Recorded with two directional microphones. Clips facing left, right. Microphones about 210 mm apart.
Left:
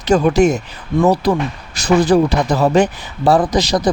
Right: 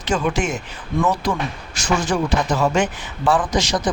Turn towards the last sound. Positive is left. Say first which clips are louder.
# left 5 dB
turn(degrees=35)  # may be behind; listen again after turning